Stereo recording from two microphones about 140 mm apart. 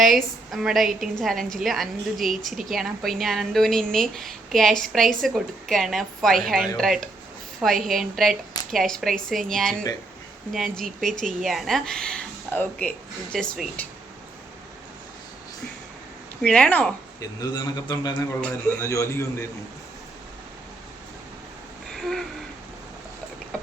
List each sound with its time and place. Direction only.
0.0 s a woman's voice: centre (ahead or behind)
11.2 s a woman's voice: 65° right (ahead or behind)
11.4 s a woman's voice: centre (ahead or behind)
16.4 s speech: 5° left (ahead or behind)
17.2 s speech: 30° left (ahead or behind)
18.8 s a man's voice: 20° left (ahead or behind)
21.9 s a sound: 5° left (ahead or behind)